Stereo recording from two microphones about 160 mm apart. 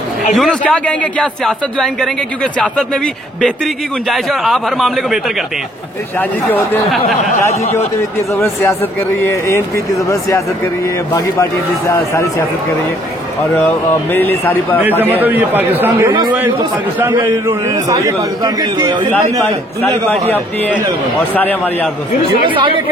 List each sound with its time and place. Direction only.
0.3 s a man's voice: centre (ahead or behind)
4.1 s a man's voice: centre (ahead or behind)
6.1 s speech: 10° left (ahead or behind)
9.2 s speech: 15° left (ahead or behind)
11.9 s speech: 15° left (ahead or behind)
13.6 s speech: 10° left (ahead or behind)
14.8 s a man's voice: 10° right (ahead or behind); by 19.0 s 25° right (ahead or behind)
20.2 s speech: 10° left (ahead or behind)
22.5 s speech: 30° right (ahead or behind)